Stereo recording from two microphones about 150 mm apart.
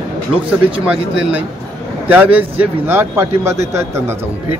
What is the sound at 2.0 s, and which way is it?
Speech, 10° right (ahead or behind).